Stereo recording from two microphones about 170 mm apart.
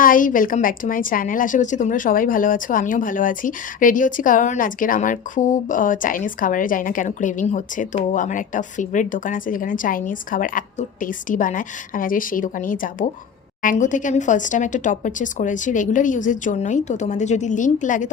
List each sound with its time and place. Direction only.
0.0 s a woman's voice: 55° left (ahead or behind)